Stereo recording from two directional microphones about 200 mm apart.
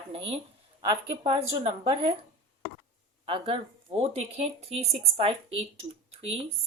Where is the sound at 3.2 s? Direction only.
30° right (ahead or behind).